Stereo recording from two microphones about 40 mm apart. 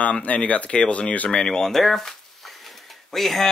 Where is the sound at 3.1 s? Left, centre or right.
Centre.